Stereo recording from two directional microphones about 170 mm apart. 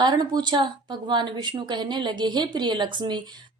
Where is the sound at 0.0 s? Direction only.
25° right (ahead or behind).